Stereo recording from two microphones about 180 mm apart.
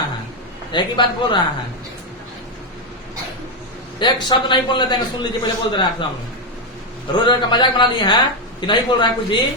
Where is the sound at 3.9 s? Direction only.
25° left (ahead or behind).